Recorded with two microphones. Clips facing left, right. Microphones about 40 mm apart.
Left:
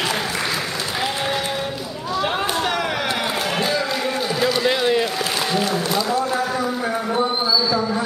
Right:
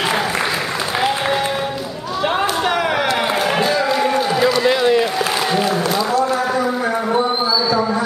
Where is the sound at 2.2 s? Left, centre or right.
Centre.